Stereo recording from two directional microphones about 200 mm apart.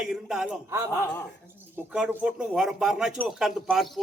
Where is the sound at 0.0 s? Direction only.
5° right (ahead or behind).